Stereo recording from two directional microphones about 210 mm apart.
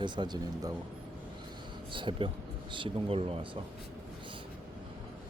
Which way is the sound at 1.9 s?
25° right (ahead or behind).